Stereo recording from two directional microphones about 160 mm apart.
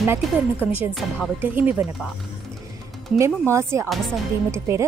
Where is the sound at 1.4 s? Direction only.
10° right (ahead or behind).